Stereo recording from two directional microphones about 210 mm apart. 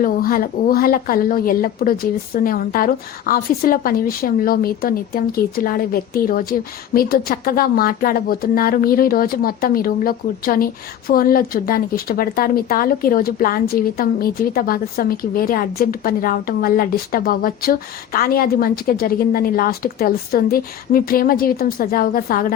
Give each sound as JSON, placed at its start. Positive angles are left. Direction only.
{"t": 0.0, "sound": "a woman's voice", "side_deg": 40}